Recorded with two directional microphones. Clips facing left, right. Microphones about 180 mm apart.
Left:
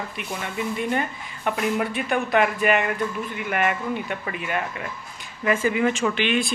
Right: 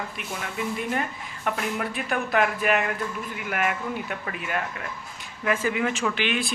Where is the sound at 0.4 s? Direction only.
Centre (ahead or behind).